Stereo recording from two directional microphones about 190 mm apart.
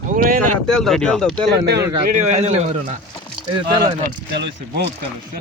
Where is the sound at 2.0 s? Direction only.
40° right (ahead or behind).